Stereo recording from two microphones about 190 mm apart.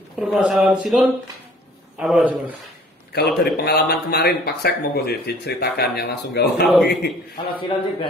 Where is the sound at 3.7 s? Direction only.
55° left (ahead or behind).